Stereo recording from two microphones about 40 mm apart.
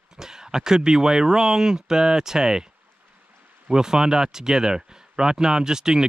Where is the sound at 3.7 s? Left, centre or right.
Centre.